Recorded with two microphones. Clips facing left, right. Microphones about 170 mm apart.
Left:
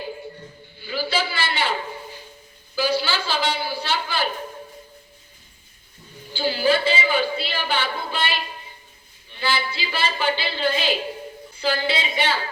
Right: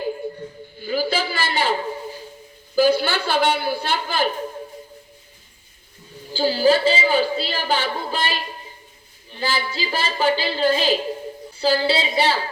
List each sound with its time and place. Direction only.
0.8 s a sound: 45° right (ahead or behind)
2.7 s a woman's voice: 50° right (ahead or behind)
6.3 s a woman's voice: 40° right (ahead or behind)